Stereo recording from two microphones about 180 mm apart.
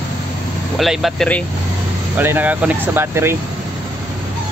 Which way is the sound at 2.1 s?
10° right (ahead or behind).